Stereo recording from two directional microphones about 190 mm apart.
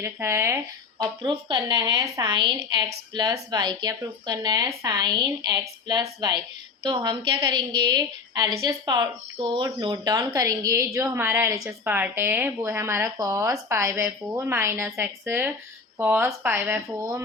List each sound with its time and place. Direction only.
0.0 s speech: 15° right (ahead or behind)